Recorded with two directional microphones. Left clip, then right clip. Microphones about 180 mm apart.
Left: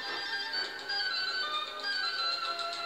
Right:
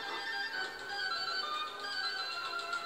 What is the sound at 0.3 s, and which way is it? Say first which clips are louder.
Music: left 3 dB; 35° left (ahead or behind).